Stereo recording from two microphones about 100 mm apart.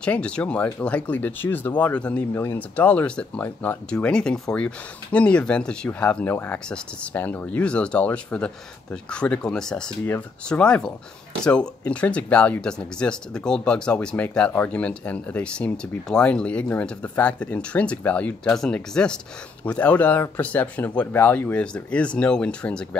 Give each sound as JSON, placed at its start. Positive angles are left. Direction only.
{"t": 0.0, "sound": "speech", "side_deg": 10}
{"t": 2.3, "sound": "speech", "side_deg": 25}